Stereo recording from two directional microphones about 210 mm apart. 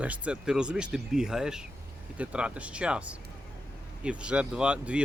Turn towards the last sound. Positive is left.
turn(degrees=-5)  # may be behind; listen again after turning